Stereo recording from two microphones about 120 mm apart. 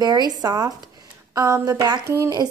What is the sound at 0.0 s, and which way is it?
A woman's voice, 30° right (ahead or behind).